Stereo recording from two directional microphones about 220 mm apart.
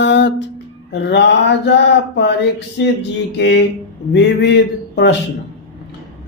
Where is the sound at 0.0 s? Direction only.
55° left (ahead or behind).